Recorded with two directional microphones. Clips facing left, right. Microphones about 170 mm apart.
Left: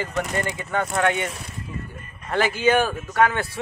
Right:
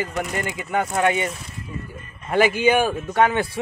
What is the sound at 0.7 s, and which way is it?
Speech, 10° right (ahead or behind).